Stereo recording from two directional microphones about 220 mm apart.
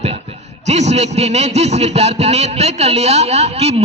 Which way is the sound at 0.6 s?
30° right (ahead or behind).